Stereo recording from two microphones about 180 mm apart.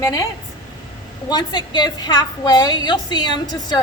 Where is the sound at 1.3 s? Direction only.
25° left (ahead or behind).